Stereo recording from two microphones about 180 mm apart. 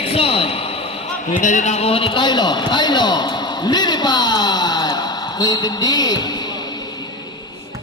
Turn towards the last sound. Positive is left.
turn(degrees=20)  # may be behind; listen again after turning